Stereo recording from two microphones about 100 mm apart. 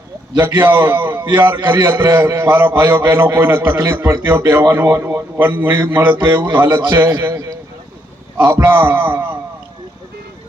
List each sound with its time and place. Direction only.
0.3 s a man's voice: 20° right (ahead or behind)
8.4 s a man's voice: 25° right (ahead or behind)